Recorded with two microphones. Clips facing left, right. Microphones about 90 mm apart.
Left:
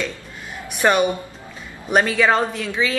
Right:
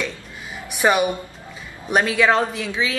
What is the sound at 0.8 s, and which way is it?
A woman's voice, 10° right (ahead or behind).